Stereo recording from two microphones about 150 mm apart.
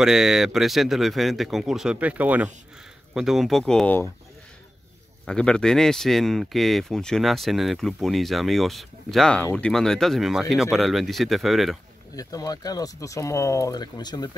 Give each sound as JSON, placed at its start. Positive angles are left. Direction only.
{"t": 0.0, "sound": "speech", "side_deg": -5}
{"t": 5.2, "sound": "speech", "side_deg": 5}
{"t": 12.2, "sound": "speech", "side_deg": 25}